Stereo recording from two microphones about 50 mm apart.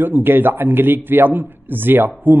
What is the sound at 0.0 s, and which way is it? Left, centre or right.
A man's voice, right.